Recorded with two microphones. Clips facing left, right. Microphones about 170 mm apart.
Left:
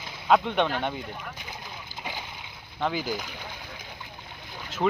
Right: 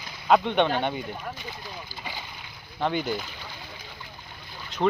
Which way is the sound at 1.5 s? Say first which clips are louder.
Right 2 dB; 20° left (ahead or behind).